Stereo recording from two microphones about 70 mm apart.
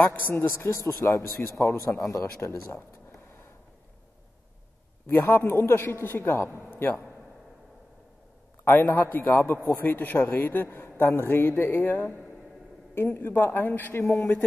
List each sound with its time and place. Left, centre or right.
0.0 s a man's voice: left
0.8 s a man's voice: left
5.0 s a man's voice: left
8.6 s a man's voice: left